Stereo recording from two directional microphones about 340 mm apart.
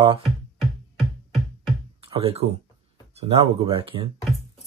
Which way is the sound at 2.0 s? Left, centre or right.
Centre.